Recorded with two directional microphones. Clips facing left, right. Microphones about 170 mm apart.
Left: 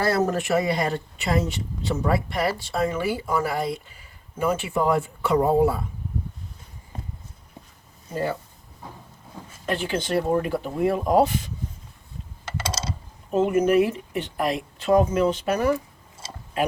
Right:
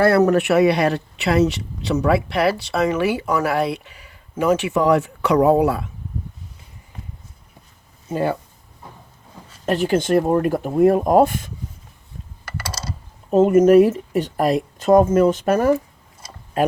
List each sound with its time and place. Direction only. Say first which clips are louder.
0.0 s speech: right 8 dB; 65° right (ahead or behind)
8.1 s speech: right 5 dB; 60° right (ahead or behind)
9.6 s speech: right 7 dB; 45° right (ahead or behind)
12.5 s typing: left 1 dB; 25° left (ahead or behind)
13.3 s speech: right 7 dB; 40° right (ahead or behind)
16.2 s a sound: left 2 dB; 25° left (ahead or behind)